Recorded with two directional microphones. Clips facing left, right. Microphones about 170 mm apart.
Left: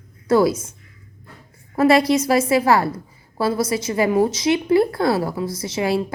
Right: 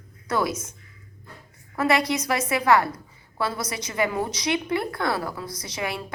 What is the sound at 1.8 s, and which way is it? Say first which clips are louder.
A woman's voice: left 8 dB; 30° left (ahead or behind).